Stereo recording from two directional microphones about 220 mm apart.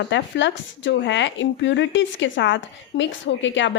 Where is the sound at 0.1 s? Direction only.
55° left (ahead or behind).